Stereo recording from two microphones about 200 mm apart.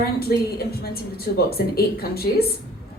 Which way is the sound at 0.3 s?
50° left (ahead or behind).